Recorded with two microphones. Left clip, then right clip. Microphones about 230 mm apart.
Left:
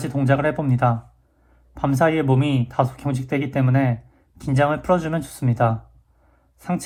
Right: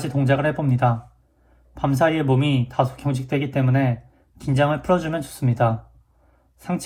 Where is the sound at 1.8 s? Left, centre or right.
Left.